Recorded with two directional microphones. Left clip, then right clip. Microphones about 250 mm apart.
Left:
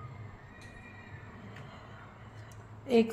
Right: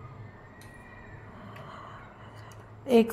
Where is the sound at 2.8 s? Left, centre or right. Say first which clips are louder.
Right 4 dB; centre.